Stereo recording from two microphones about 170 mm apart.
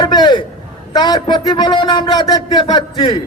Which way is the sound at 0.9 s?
25° left (ahead or behind).